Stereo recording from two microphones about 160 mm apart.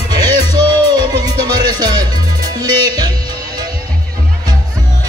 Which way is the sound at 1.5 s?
25° right (ahead or behind).